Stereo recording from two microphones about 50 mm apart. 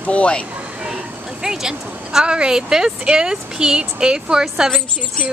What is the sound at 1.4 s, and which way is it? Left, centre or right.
Speech, centre.